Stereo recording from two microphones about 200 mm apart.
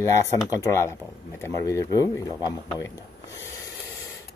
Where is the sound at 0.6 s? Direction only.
15° left (ahead or behind).